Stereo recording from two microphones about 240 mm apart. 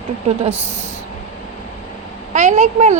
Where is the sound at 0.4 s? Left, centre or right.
Right.